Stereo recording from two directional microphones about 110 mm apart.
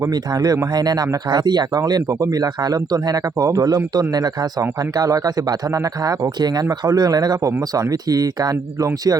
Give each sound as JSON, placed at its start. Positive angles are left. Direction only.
{"t": 0.0, "sound": "speech", "side_deg": -35}